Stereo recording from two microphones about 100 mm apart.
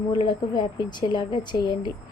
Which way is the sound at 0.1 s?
50° left (ahead or behind).